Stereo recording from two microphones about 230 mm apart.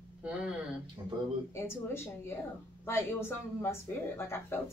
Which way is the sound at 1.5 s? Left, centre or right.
Centre.